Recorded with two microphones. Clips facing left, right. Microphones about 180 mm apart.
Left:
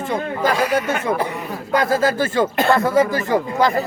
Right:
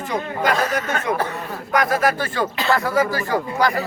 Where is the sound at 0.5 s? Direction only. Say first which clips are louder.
Left 3 dB; 10° left (ahead or behind).